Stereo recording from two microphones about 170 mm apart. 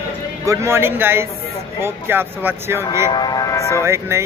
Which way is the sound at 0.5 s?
15° right (ahead or behind).